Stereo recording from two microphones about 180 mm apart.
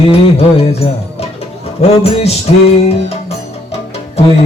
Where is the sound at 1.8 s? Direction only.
35° left (ahead or behind).